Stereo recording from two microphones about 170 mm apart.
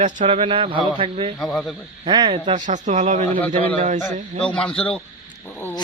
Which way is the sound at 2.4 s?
45° right (ahead or behind).